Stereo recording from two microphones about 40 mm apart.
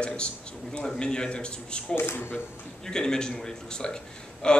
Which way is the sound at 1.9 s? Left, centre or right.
Left.